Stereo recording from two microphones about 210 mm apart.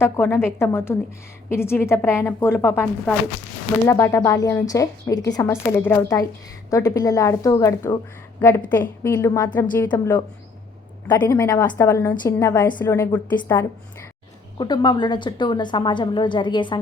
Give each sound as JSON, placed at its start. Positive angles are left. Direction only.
{"t": 0.0, "sound": "a woman's voice", "side_deg": 10}
{"t": 11.1, "sound": "a woman's voice", "side_deg": 15}